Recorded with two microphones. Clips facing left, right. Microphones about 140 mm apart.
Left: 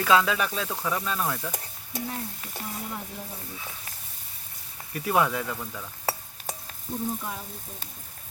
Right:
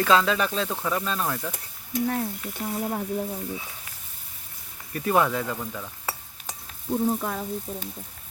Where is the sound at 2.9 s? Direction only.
50° right (ahead or behind).